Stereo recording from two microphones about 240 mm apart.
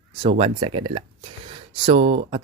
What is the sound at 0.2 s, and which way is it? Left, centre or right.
Speech, right.